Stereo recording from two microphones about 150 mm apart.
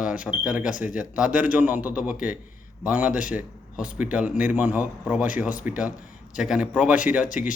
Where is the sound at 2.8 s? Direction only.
10° right (ahead or behind).